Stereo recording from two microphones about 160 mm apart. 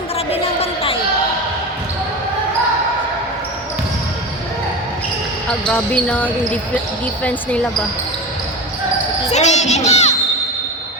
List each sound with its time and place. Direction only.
0.3 s a sound: 35° left (ahead or behind)
5.5 s speech: 5° left (ahead or behind)
9.3 s a child's voice: 45° left (ahead or behind)